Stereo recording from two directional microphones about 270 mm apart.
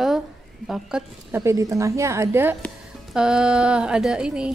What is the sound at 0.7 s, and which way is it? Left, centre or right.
A woman's voice, centre.